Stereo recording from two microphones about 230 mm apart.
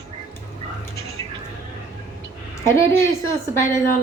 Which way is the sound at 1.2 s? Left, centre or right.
Centre.